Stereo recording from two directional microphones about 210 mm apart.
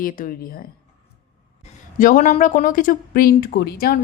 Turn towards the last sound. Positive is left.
turn(degrees=45)  # may be behind; listen again after turning